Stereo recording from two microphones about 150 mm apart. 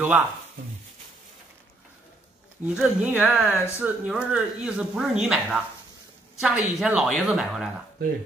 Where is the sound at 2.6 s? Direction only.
5° right (ahead or behind).